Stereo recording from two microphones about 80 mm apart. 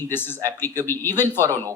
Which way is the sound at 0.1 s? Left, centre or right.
Left.